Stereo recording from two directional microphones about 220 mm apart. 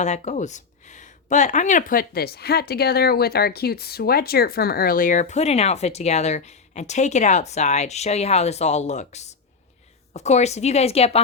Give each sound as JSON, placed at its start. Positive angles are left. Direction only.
{"t": 0.0, "sound": "a woman's voice", "side_deg": 30}